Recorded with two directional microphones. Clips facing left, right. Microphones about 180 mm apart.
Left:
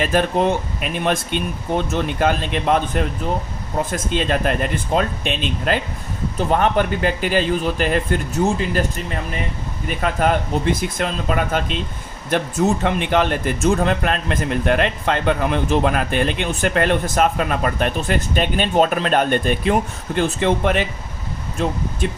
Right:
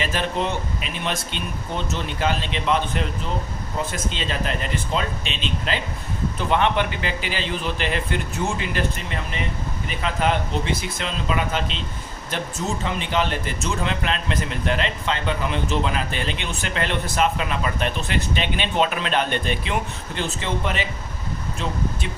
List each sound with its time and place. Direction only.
0.0 s speech: 50° left (ahead or behind)
12.3 s speech: 60° left (ahead or behind)